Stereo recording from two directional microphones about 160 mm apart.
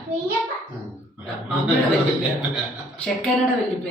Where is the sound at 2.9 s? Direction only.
5° left (ahead or behind).